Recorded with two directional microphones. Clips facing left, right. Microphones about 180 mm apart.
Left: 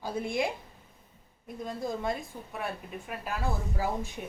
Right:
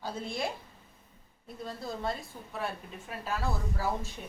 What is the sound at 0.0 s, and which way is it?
Speech, 15° left (ahead or behind).